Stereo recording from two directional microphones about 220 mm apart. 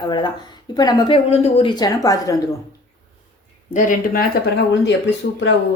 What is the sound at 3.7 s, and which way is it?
Speech, 35° left (ahead or behind).